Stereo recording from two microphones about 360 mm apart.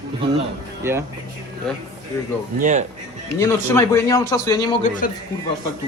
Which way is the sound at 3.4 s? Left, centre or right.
Centre.